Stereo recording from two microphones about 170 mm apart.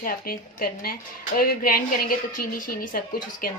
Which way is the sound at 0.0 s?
60° left (ahead or behind).